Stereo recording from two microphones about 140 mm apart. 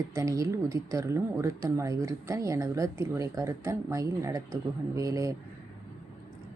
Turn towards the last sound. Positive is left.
turn(degrees=-25)  # may be behind; listen again after turning